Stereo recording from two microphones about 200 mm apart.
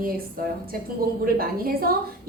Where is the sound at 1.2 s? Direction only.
45° right (ahead or behind).